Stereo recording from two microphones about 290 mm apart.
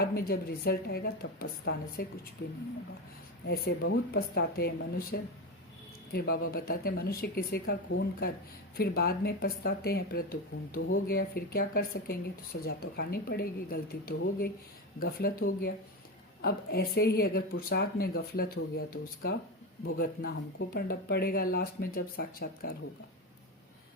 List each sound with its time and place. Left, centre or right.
0.0 s a woman's voice: left
3.4 s a woman's voice: left